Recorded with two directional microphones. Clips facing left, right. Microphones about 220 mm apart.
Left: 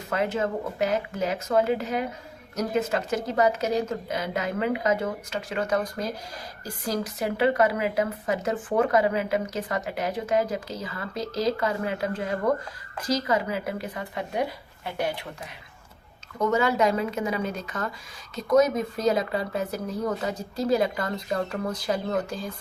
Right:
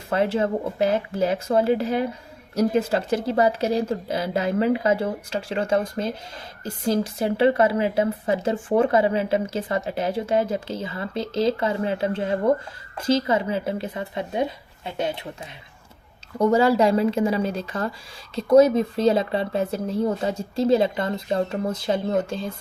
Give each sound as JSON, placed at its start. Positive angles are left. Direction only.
{"t": 0.1, "sound": "a woman's voice", "side_deg": -30}
{"t": 16.4, "sound": "a woman's voice", "side_deg": -30}